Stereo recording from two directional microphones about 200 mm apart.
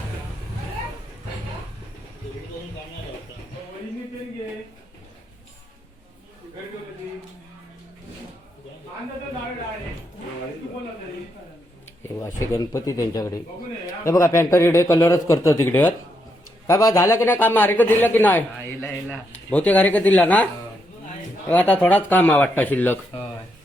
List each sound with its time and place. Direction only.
12.2 s speech: 15° left (ahead or behind)